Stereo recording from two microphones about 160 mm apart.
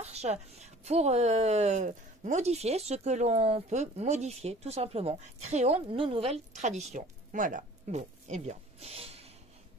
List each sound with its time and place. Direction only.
0.0 s a woman's voice: 45° right (ahead or behind)